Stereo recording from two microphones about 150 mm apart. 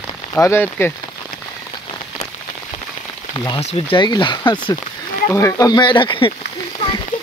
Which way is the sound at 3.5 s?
30° left (ahead or behind).